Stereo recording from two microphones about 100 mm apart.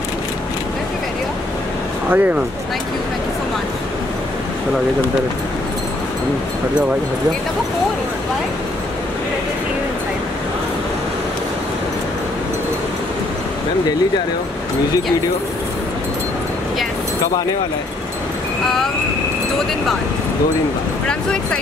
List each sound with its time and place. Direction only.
2.0 s speech: 20° right (ahead or behind)